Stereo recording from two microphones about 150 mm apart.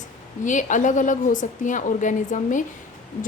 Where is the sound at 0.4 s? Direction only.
55° left (ahead or behind).